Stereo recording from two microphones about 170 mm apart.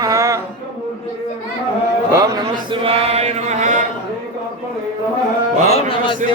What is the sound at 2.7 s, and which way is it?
Mantra, 35° right (ahead or behind).